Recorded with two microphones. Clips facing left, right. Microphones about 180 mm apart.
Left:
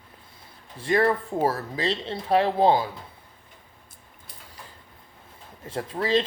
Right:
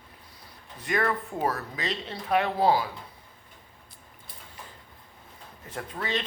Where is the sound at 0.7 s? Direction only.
30° left (ahead or behind).